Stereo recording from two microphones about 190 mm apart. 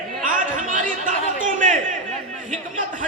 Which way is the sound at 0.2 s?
45° right (ahead or behind).